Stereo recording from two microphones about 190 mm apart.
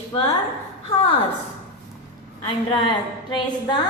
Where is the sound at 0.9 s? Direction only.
10° left (ahead or behind).